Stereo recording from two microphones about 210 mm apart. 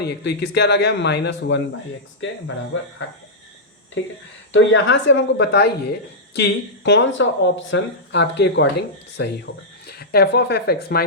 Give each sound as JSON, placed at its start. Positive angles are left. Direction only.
{"t": 0.0, "sound": "speech", "side_deg": 55}
{"t": 2.7, "sound": "speech", "side_deg": 65}
{"t": 4.0, "sound": "speech", "side_deg": 65}